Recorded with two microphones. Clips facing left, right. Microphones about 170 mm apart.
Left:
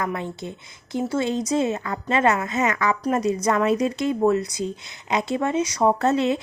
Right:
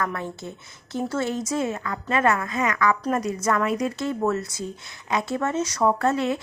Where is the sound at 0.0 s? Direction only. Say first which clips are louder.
Left 1 dB; 15° left (ahead or behind).